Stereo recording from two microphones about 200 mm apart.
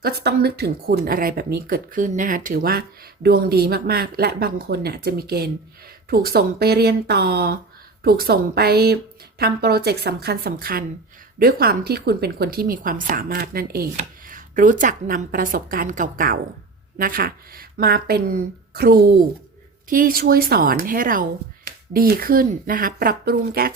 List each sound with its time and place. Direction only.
0.0 s speech: 55° right (ahead or behind)